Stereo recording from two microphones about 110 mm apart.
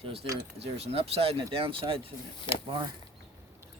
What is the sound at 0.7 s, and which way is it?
Speech, 65° right (ahead or behind).